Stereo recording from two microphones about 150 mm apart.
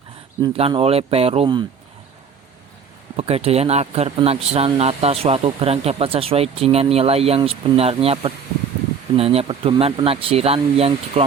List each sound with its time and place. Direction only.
0.4 s speech: 35° right (ahead or behind)
3.2 s speech: 40° right (ahead or behind)